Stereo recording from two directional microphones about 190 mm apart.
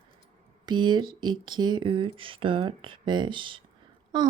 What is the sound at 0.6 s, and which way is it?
Speech, 25° right (ahead or behind).